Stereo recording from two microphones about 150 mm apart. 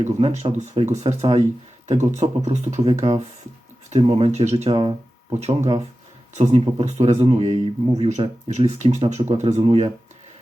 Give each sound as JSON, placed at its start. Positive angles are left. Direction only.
{"t": 0.0, "sound": "speech", "side_deg": -50}